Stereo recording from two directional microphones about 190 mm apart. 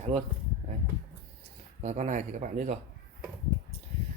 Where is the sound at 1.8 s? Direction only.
40° right (ahead or behind).